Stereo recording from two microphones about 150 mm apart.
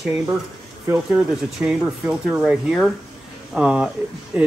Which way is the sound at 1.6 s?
10° right (ahead or behind).